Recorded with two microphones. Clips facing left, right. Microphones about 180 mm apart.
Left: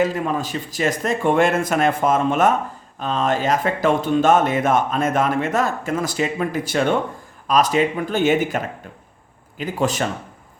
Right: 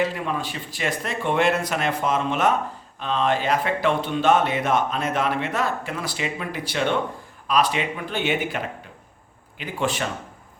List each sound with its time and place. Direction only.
0.0 s speech: 45° left (ahead or behind)